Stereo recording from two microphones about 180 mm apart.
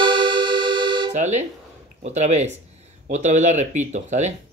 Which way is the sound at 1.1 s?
40° right (ahead or behind).